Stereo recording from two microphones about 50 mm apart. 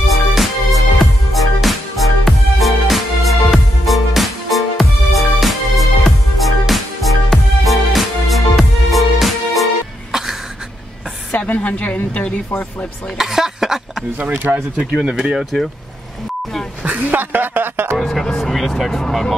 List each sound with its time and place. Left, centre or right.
0.0 s music: centre
10.1 s a sound: centre
11.3 s a woman's voice: left
13.2 s speech: centre
16.8 s a sound: right
17.2 s speech: right
17.9 s speech: centre